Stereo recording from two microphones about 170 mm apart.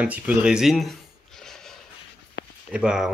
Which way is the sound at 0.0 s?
10° right (ahead or behind).